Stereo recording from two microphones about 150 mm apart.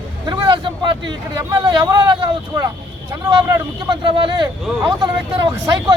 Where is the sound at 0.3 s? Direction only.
30° right (ahead or behind).